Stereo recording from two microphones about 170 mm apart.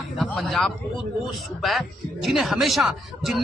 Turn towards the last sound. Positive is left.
turn(degrees=0)  # may be behind; listen again after turning